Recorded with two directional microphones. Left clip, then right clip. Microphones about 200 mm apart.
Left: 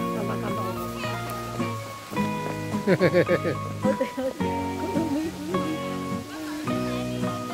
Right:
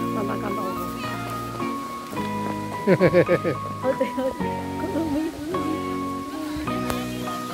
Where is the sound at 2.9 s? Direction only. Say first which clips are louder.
Right 3 dB; 5° right (ahead or behind).